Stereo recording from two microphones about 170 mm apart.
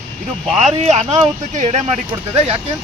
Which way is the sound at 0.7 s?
40° right (ahead or behind).